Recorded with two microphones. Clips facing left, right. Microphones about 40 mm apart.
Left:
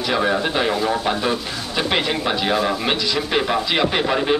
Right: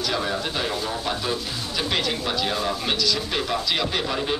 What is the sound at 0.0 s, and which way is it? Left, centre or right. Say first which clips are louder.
Speech: left 6 dB; left.